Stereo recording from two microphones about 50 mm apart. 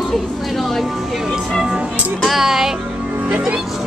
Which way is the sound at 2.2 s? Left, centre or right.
Centre.